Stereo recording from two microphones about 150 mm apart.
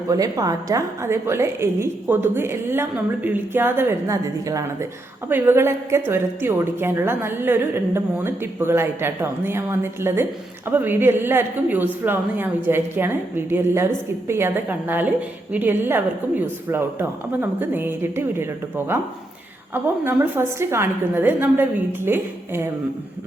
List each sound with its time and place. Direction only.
0.1 s a woman's voice: 25° right (ahead or behind)
19.7 s a woman's voice: 15° right (ahead or behind)